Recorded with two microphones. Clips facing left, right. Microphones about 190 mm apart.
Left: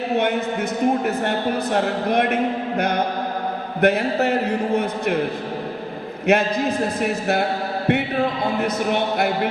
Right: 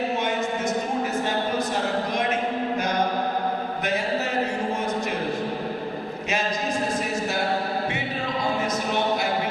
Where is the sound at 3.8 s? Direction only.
60° left (ahead or behind).